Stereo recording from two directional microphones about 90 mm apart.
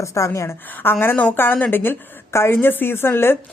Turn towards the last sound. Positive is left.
turn(degrees=25)  # may be behind; listen again after turning